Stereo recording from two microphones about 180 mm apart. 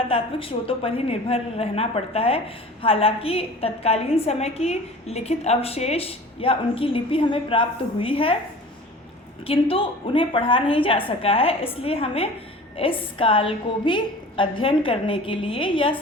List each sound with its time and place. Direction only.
0.1 s a woman's voice: 30° left (ahead or behind)
9.5 s a woman's voice: 30° left (ahead or behind)